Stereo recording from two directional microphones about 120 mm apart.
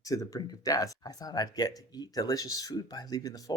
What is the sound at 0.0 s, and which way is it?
Speech, 30° left (ahead or behind).